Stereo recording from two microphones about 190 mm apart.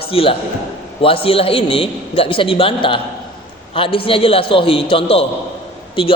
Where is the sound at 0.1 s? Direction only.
30° left (ahead or behind).